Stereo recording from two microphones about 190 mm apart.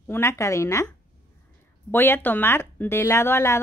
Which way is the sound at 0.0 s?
15° left (ahead or behind).